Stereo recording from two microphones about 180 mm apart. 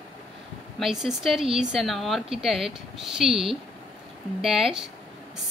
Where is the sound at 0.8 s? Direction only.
Centre (ahead or behind).